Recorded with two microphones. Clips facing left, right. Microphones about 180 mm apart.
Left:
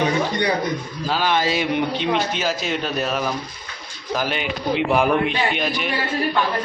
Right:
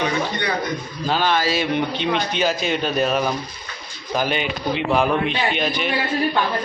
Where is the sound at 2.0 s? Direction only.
5° left (ahead or behind).